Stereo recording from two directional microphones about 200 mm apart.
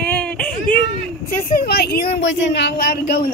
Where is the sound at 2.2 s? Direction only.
65° left (ahead or behind).